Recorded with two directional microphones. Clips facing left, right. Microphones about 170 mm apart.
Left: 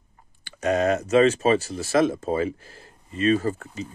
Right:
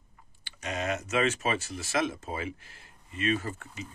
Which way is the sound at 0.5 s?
45° left (ahead or behind).